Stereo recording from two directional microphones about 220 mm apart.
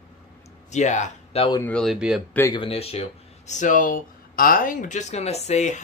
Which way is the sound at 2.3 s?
15° left (ahead or behind).